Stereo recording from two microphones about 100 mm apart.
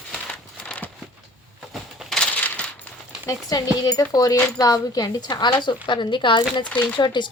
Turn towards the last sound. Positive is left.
turn(degrees=50)  # may be behind; listen again after turning